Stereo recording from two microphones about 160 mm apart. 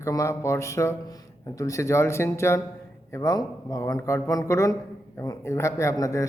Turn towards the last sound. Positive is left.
turn(degrees=20)  # may be behind; listen again after turning